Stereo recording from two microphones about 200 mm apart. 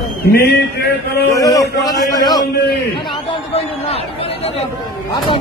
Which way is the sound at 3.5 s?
30° left (ahead or behind).